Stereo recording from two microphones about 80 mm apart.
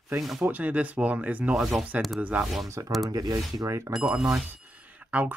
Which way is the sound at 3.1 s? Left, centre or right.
Right.